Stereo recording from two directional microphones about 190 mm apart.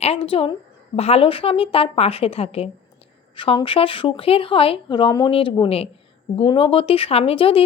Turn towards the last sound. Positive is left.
turn(degrees=30)  # may be behind; listen again after turning